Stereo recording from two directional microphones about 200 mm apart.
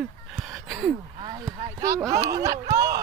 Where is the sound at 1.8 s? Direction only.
15° right (ahead or behind).